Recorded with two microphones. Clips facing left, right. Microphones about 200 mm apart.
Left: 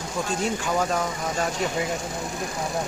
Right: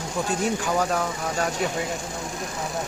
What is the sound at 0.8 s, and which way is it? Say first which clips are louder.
Speech: even; 10° left (ahead or behind).